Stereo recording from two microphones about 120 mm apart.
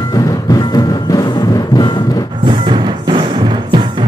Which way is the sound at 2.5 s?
40° right (ahead or behind).